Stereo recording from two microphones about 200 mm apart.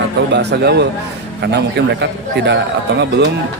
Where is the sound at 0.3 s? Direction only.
55° right (ahead or behind).